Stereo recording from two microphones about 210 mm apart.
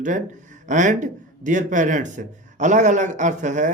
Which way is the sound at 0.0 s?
35° right (ahead or behind).